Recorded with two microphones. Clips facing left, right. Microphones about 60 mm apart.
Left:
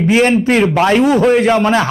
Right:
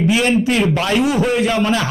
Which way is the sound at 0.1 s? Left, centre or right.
Left.